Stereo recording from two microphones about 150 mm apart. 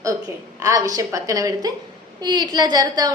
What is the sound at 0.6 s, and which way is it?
A woman's voice, 25° right (ahead or behind).